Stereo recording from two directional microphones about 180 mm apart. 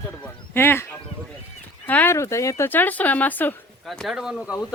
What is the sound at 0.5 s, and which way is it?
Speech, 10° left (ahead or behind).